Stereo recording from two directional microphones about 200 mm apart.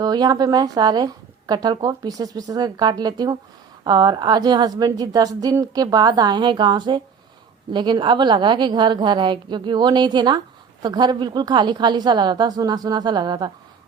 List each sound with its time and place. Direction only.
0.0 s a woman's voice: 20° right (ahead or behind)